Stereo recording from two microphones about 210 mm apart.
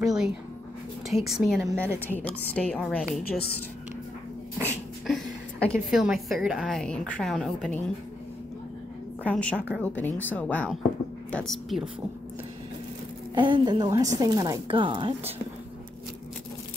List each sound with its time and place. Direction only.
0.0 s writing: 5° right (ahead or behind)
1.0 s a woman's voice: centre (ahead or behind)
1.7 s a woman's voice: 10° right (ahead or behind)
2.0 s a woman's voice: 10° left (ahead or behind)
4.6 s a sound: 10° right (ahead or behind)
5.1 s a woman's voice: 5° left (ahead or behind)
9.2 s a woman's voice: 5° left (ahead or behind)
13.3 s a woman's voice: 20° right (ahead or behind)